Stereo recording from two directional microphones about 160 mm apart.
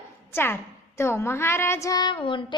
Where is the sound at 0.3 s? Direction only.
15° left (ahead or behind).